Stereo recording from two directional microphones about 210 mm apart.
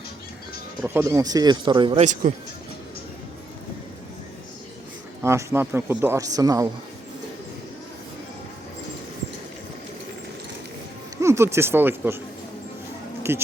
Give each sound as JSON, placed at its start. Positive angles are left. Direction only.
{"t": 0.9, "sound": "speech", "side_deg": -15}
{"t": 5.2, "sound": "speech", "side_deg": -15}
{"t": 11.2, "sound": "speech", "side_deg": -15}
{"t": 13.3, "sound": "speech", "side_deg": -10}